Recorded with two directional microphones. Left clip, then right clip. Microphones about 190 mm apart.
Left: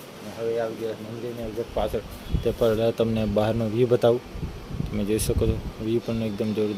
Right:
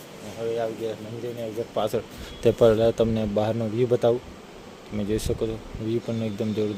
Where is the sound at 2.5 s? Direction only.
25° right (ahead or behind).